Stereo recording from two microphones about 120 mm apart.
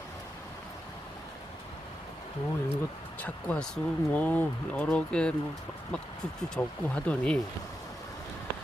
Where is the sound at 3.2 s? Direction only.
10° left (ahead or behind).